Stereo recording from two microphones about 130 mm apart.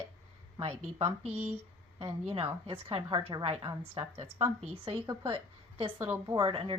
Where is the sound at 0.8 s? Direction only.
50° right (ahead or behind).